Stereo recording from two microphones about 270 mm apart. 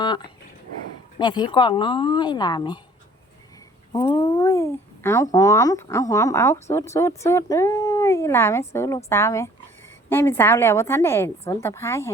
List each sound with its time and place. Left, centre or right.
1.2 s speech: centre
3.9 s speech: centre